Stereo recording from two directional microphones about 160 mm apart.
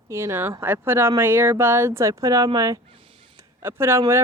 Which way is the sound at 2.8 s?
35° right (ahead or behind).